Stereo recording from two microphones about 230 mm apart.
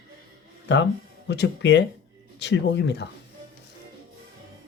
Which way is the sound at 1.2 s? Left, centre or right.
Left.